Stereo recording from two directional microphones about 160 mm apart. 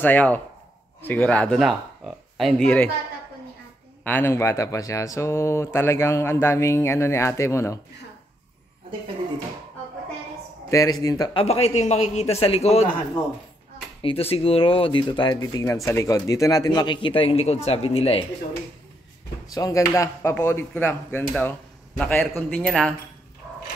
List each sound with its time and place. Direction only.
0.0 s speech: 10° left (ahead or behind)
4.0 s speech: 10° left (ahead or behind)
10.7 s speech: 25° left (ahead or behind)
11.3 s a man's voice: 40° left (ahead or behind)
14.0 s a man's voice: 40° left (ahead or behind)
19.4 s speech: 20° left (ahead or behind); by 22.9 s 5° left (ahead or behind)